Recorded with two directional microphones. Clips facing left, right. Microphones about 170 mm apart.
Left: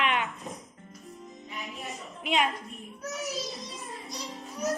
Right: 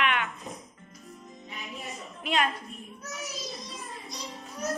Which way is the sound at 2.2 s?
20° left (ahead or behind).